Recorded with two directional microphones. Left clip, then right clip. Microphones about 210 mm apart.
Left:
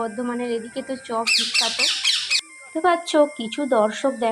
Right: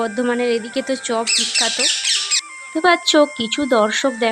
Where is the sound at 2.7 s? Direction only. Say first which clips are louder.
Right 4 dB; 30° right (ahead or behind).